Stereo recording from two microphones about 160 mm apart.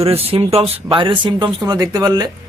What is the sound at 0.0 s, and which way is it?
A man's voice, 40° right (ahead or behind).